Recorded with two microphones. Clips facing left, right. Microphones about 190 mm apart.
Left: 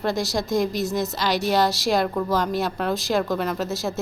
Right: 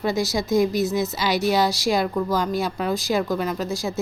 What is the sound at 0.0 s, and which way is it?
Speech, centre (ahead or behind).